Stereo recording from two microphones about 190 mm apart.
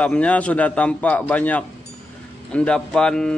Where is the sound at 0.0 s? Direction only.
5° left (ahead or behind).